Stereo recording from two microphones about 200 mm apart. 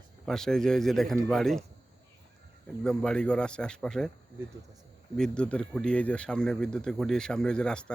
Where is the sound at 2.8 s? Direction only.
5° left (ahead or behind).